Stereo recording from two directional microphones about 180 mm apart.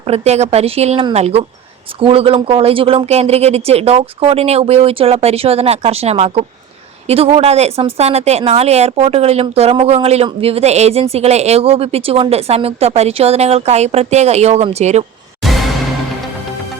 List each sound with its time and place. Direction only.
0.0 s a woman's voice: 35° right (ahead or behind)
15.4 s music: centre (ahead or behind)